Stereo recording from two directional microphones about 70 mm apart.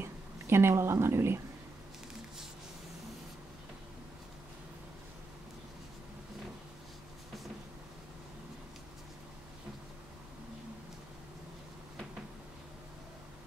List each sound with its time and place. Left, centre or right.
0.0 s speech: right